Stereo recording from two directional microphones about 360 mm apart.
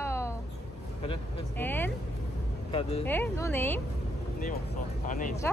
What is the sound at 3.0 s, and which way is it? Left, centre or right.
Speech, centre.